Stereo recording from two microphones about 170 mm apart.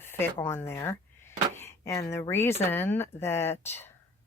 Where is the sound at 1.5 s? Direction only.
15° left (ahead or behind).